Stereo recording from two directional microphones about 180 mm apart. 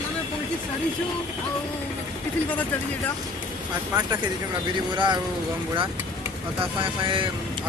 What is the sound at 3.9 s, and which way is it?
Speech, 25° right (ahead or behind).